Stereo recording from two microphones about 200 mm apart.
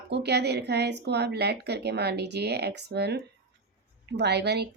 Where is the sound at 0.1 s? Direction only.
55° right (ahead or behind).